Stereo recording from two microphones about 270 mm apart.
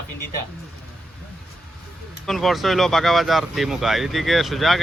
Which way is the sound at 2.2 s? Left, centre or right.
Centre.